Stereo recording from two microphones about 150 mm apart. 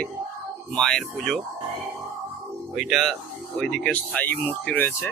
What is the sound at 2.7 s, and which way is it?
Speech, centre (ahead or behind).